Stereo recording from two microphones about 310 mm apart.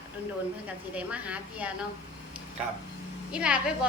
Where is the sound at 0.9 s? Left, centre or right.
Centre.